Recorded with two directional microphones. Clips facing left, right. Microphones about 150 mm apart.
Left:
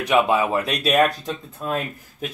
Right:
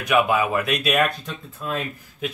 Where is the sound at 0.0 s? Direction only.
30° left (ahead or behind).